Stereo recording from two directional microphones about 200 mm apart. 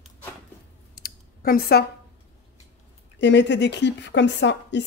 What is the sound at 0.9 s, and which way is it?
Clicking, 50° left (ahead or behind).